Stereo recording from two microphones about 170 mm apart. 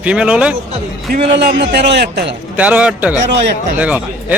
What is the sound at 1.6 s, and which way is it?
Speech, 75° right (ahead or behind).